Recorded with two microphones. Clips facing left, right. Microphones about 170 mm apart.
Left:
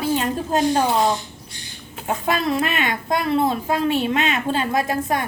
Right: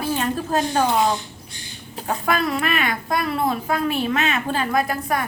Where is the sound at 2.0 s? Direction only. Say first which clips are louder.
Left 1 dB; 25° left (ahead or behind).